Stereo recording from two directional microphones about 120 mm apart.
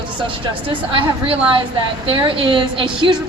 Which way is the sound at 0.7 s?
45° right (ahead or behind).